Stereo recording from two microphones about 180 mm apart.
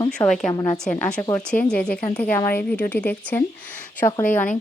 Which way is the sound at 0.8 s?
5° left (ahead or behind).